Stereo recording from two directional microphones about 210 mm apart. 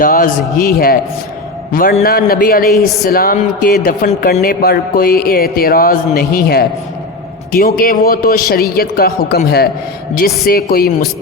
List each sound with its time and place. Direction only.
0.0 s a man's voice: 40° left (ahead or behind)
2.7 s a woman's voice: centre (ahead or behind)
3.1 s speech: 45° left (ahead or behind)